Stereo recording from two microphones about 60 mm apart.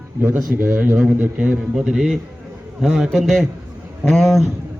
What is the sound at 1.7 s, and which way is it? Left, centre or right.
A man's voice, centre.